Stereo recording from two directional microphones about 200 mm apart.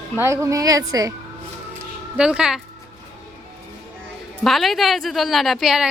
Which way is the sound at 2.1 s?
5° right (ahead or behind).